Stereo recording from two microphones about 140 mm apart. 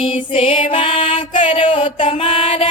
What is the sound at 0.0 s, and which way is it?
Music, 40° left (ahead or behind).